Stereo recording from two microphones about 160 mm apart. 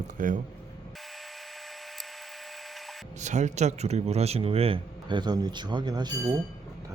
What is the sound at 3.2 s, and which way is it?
A man's voice, 50° right (ahead or behind).